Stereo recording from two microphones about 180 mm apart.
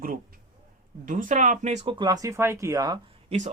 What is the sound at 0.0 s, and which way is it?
Speech, 50° right (ahead or behind).